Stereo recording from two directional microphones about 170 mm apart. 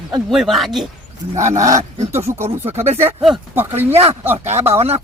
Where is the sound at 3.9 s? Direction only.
35° right (ahead or behind).